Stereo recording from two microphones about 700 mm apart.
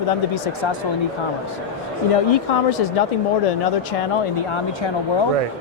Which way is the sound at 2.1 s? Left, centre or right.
Left.